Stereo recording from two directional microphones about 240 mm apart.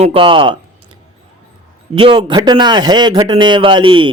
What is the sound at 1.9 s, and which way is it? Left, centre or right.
A man's voice, right.